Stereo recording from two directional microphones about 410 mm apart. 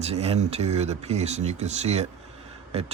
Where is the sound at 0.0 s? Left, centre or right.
Centre.